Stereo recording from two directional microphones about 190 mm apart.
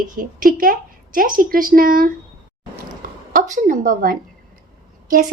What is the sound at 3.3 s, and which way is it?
A woman's voice, 45° right (ahead or behind).